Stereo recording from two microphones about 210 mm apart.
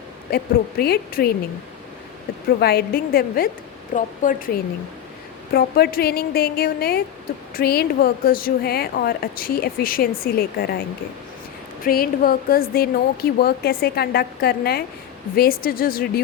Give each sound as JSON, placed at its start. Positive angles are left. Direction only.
{"t": 0.3, "sound": "speech", "side_deg": 50}
{"t": 2.6, "sound": "speech", "side_deg": 50}
{"t": 5.5, "sound": "speech", "side_deg": 50}